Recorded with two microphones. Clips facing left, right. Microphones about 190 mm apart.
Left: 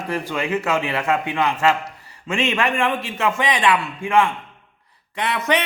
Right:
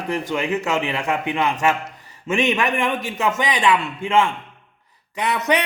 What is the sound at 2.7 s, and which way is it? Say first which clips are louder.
A man's voice: even; 15° right (ahead or behind).